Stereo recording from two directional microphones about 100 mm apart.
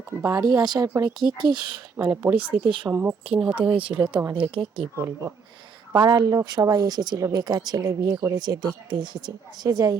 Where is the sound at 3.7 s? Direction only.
60° right (ahead or behind).